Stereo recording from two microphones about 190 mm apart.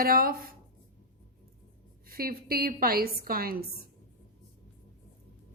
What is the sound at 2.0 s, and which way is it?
A woman's voice, 50° right (ahead or behind).